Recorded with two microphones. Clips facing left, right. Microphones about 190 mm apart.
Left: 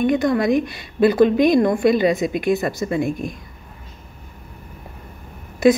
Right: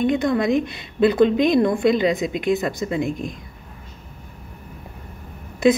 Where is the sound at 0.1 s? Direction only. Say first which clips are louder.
Left 2 dB; 20° right (ahead or behind).